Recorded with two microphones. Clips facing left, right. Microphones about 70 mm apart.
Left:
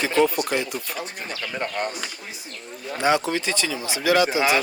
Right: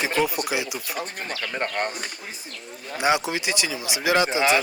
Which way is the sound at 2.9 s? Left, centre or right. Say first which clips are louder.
Left 1 dB; centre.